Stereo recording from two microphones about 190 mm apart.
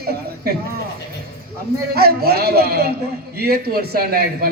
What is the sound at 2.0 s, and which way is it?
A man's voice, 55° right (ahead or behind).